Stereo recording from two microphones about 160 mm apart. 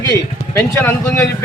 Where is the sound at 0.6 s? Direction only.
15° left (ahead or behind).